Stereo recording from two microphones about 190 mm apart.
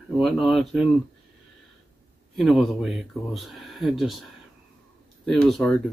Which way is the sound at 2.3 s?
Centre (ahead or behind).